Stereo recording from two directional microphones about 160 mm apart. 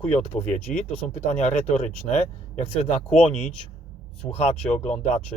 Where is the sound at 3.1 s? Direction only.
45° left (ahead or behind).